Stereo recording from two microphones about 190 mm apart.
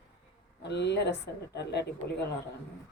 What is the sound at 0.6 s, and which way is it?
Speech, 65° left (ahead or behind).